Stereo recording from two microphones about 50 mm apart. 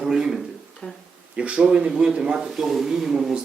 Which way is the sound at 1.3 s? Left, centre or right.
Right.